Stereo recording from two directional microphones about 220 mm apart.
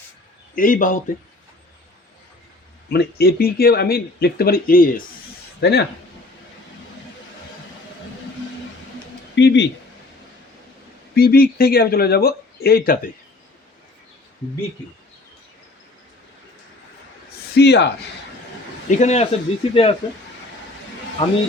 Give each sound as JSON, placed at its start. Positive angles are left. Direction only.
{"t": 0.5, "sound": "a man's voice", "side_deg": 40}
{"t": 2.9, "sound": "speech", "side_deg": 45}
{"t": 5.5, "sound": "speech", "side_deg": 50}
{"t": 9.3, "sound": "speech", "side_deg": 55}
{"t": 11.1, "sound": "speech", "side_deg": 45}
{"t": 17.5, "sound": "speech", "side_deg": 50}
{"t": 18.9, "sound": "a man's voice", "side_deg": 30}
{"t": 21.2, "sound": "speech", "side_deg": 25}